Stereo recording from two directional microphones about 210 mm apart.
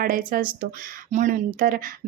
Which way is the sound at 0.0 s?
40° right (ahead or behind).